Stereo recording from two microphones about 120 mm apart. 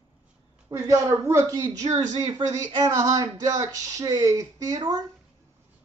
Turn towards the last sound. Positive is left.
turn(degrees=-30)  # may be behind; listen again after turning